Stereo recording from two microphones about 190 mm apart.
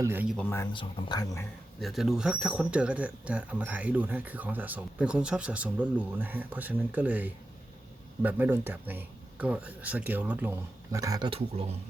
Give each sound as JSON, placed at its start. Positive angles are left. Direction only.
{"t": 0.0, "sound": "speech", "side_deg": -10}
{"t": 0.3, "sound": "speech", "side_deg": 15}
{"t": 0.7, "sound": "speech", "side_deg": 25}
{"t": 1.8, "sound": "speech", "side_deg": 0}